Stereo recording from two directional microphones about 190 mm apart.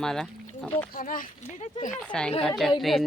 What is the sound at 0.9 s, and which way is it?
Speech, 45° left (ahead or behind).